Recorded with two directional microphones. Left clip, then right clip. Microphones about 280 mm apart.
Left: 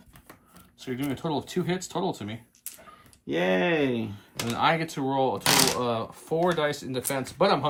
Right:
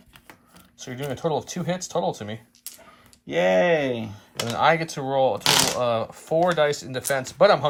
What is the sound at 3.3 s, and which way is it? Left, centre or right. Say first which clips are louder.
Speech: right 6 dB; right.